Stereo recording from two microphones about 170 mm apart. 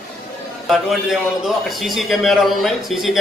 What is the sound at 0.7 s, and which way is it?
A man's voice, centre (ahead or behind).